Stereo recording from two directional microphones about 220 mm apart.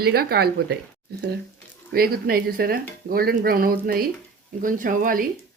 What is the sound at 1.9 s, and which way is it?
Speech, 45° right (ahead or behind).